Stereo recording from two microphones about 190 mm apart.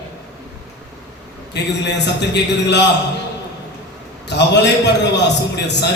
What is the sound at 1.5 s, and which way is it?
A man's voice, 65° left (ahead or behind).